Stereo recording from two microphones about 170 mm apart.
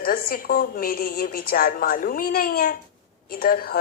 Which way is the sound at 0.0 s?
55° left (ahead or behind).